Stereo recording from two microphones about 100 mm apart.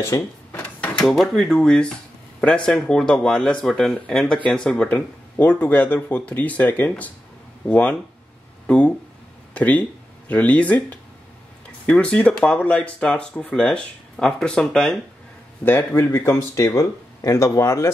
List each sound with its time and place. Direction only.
0.1 s speech: 35° left (ahead or behind)
0.5 s drawer open or close: 15° left (ahead or behind)
1.0 s speech: centre (ahead or behind)
8.6 s a sound: 10° left (ahead or behind)
9.5 s speech: 15° left (ahead or behind)
15.6 s speech: 20° left (ahead or behind)